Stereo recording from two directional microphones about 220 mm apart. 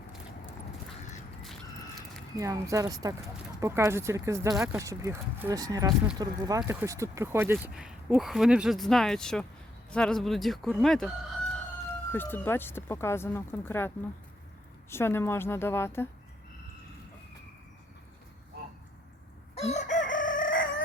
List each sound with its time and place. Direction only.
2.4 s speech: 15° right (ahead or behind); by 11.1 s centre (ahead or behind)
12.1 s speech: 10° left (ahead or behind)
19.5 s chicken: 30° left (ahead or behind)